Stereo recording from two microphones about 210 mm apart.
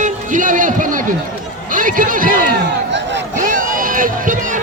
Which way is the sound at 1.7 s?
40° right (ahead or behind).